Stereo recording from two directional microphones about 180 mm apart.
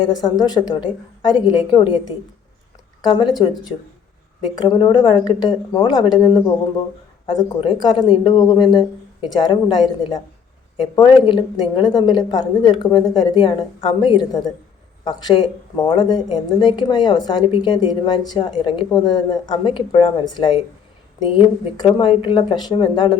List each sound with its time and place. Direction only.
0.0 s a woman's voice: 25° left (ahead or behind)
4.5 s a woman's voice: 25° left (ahead or behind)
10.9 s a woman's voice: 25° left (ahead or behind)